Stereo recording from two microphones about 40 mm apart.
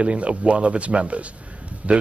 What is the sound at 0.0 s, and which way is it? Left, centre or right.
Speech, right.